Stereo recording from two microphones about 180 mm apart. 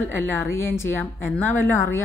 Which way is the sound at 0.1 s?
15° left (ahead or behind).